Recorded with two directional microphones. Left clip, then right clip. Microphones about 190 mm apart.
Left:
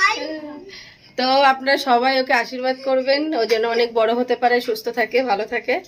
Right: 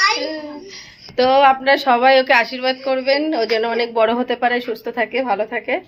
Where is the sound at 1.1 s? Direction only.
5° right (ahead or behind).